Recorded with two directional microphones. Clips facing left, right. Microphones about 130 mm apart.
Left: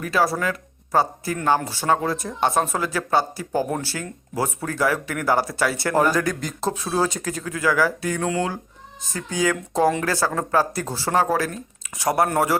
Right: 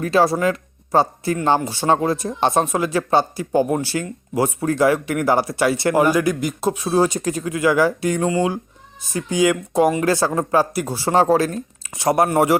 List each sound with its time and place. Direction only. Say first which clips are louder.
0.0 s speech: right 5 dB; 25° right (ahead or behind)
11.1 s speech: right 5 dB; 25° right (ahead or behind)